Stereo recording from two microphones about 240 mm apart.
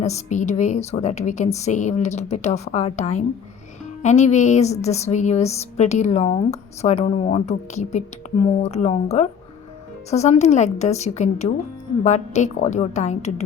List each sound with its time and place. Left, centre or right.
0.0 s a woman's voice: left